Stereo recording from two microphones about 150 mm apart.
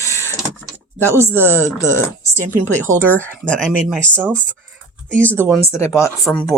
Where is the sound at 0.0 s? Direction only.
20° left (ahead or behind).